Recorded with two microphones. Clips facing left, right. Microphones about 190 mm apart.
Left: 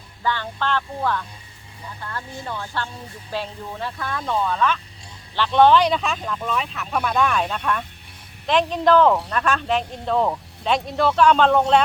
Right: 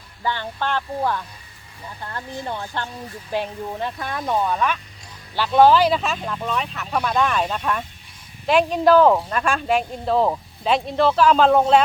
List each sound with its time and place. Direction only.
0.2 s music: 15° right (ahead or behind)
2.0 s speech: 25° right (ahead or behind)
3.3 s music: 15° right (ahead or behind)
3.7 s speech: 20° right (ahead or behind); by 7.9 s 5° right (ahead or behind)
8.4 s music: 10° right (ahead or behind)
9.3 s speech: 10° right (ahead or behind)